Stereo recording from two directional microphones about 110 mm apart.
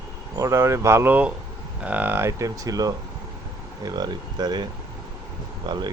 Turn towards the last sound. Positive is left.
turn(degrees=-40)  # may be behind; listen again after turning